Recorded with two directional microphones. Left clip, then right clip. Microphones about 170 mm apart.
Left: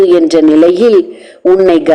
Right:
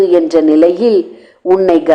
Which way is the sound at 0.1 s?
30° left (ahead or behind).